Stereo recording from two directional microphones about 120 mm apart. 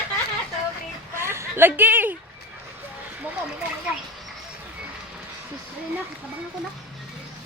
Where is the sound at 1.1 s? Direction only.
20° right (ahead or behind).